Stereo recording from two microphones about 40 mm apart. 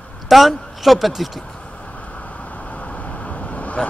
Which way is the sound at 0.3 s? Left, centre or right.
Centre.